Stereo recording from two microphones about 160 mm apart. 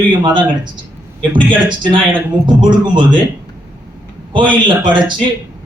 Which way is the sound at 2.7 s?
30° right (ahead or behind).